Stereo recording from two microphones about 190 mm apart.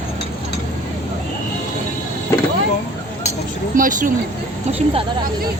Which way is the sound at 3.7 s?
45° right (ahead or behind).